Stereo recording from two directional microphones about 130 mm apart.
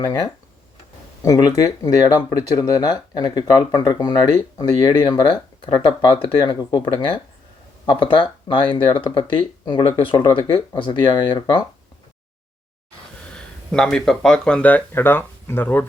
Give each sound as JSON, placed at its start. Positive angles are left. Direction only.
{"t": 0.0, "sound": "speech", "side_deg": 30}
{"t": 10.8, "sound": "speech", "side_deg": 40}
{"t": 13.3, "sound": "speech", "side_deg": 5}